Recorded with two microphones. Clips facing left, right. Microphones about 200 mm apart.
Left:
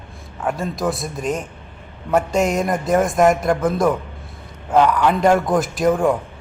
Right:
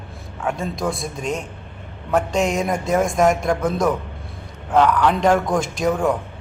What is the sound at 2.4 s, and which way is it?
Music, 40° left (ahead or behind).